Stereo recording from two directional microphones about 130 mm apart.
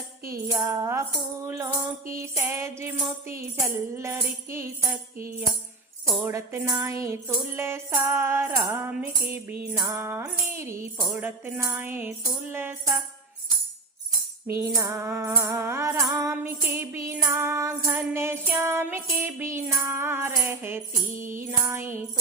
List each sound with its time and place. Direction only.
0.6 s music: 25° right (ahead or behind)
6.1 s music: 20° right (ahead or behind)
8.9 s music: 10° right (ahead or behind)
14.4 s music: 20° right (ahead or behind)